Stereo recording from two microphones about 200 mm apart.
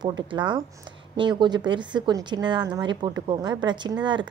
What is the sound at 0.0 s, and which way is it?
A woman's voice, 20° right (ahead or behind).